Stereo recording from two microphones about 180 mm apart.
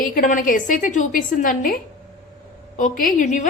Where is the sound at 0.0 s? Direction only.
50° left (ahead or behind).